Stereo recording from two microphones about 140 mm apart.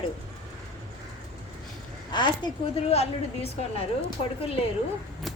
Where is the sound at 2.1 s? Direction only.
35° left (ahead or behind).